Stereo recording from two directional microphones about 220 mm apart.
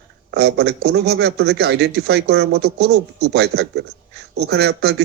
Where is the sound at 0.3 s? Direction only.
50° right (ahead or behind).